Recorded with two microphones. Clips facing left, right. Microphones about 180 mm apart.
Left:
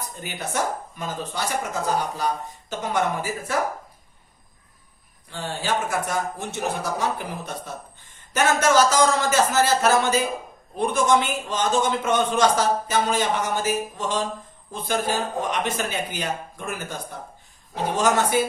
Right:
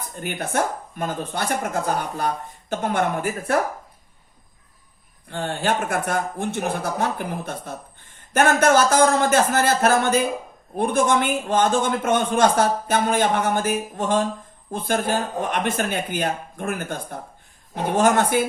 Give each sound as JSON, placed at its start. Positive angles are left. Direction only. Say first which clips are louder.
{"t": 0.2, "sound": "a man's voice", "louder": "right 4 dB", "side_deg": -55}
{"t": 5.3, "sound": "a man's voice", "louder": "right 3 dB", "side_deg": -55}